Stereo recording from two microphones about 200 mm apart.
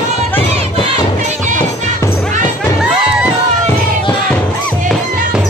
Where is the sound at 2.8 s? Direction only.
5° right (ahead or behind).